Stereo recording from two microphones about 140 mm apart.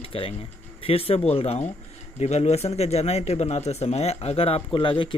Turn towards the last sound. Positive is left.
turn(degrees=35)  # may be behind; listen again after turning